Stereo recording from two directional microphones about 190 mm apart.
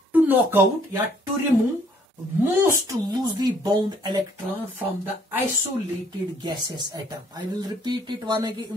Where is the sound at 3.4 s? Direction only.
20° right (ahead or behind).